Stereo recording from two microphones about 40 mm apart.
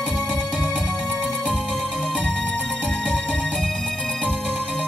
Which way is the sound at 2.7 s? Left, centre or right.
Left.